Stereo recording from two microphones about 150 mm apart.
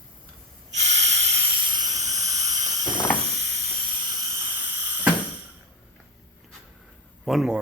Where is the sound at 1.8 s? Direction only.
50° right (ahead or behind).